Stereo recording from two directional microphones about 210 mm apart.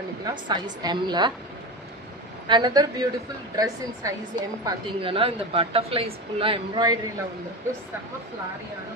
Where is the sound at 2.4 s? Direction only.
20° right (ahead or behind).